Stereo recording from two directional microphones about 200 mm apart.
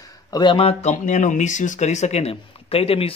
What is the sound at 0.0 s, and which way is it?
Speech, 20° left (ahead or behind).